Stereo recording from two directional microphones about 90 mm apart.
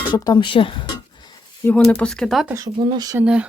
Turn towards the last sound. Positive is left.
turn(degrees=-10)  # may be behind; listen again after turning